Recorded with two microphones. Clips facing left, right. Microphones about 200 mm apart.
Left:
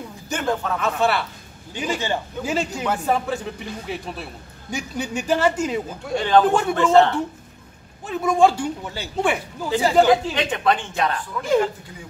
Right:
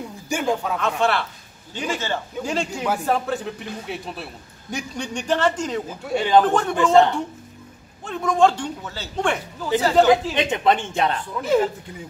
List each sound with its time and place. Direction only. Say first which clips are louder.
0.3 s a sound: right 1 dB; 10° right (ahead or behind)
0.7 s a man's voice: even; 5° left (ahead or behind)
2.0 s speech: left 1 dB; 15° left (ahead or behind)
2.5 s a man's voice: left 1 dB; 5° left (ahead or behind)
5.9 s speech: right 1 dB; 5° right (ahead or behind)
6.4 s a man's voice: left 1 dB; 10° left (ahead or behind)
10.3 s speech: right 1 dB; 20° right (ahead or behind)